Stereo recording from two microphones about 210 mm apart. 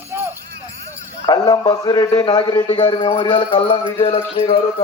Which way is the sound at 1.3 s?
20° left (ahead or behind).